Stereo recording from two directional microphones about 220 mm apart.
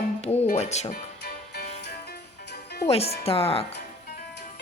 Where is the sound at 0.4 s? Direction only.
30° left (ahead or behind); by 1.7 s 45° left (ahead or behind).